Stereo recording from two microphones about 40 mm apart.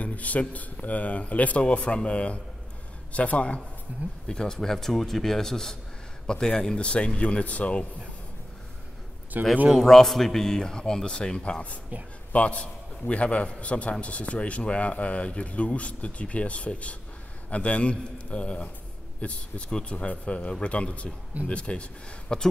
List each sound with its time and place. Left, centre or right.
0.0 s speech: left
4.3 s speech: centre; by 7.8 s left
9.3 s speech: right
9.7 s a man's voice: centre; by 21.8 s left
22.3 s speech: centre